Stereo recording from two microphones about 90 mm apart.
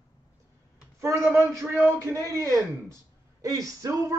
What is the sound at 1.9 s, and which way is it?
A man's voice, 35° right (ahead or behind).